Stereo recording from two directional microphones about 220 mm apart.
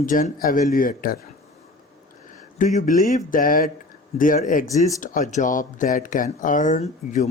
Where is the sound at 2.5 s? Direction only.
35° left (ahead or behind).